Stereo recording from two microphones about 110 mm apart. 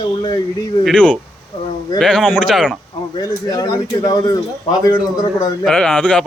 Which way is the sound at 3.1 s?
35° left (ahead or behind).